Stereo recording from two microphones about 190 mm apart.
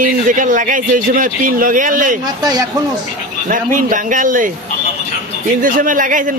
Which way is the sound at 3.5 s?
45° right (ahead or behind).